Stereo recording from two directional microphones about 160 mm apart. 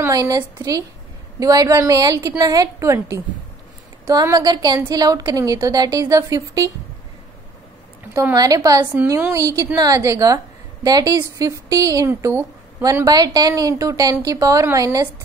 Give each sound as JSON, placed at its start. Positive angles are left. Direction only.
{"t": 0.0, "sound": "a woman's voice", "side_deg": -20}
{"t": 8.1, "sound": "a woman's voice", "side_deg": -20}